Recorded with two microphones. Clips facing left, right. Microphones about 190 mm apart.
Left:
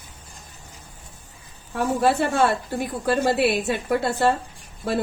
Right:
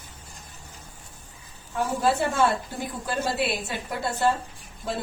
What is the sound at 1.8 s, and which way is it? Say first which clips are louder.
A woman's voice: left 3 dB; 65° left (ahead or behind).